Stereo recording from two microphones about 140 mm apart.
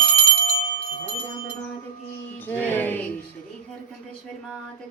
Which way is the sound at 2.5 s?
15° left (ahead or behind).